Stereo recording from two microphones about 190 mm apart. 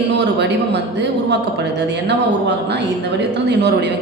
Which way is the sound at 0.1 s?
65° right (ahead or behind).